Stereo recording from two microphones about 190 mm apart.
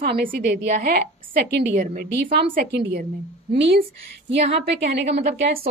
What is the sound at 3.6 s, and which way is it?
A woman's voice, 70° right (ahead or behind).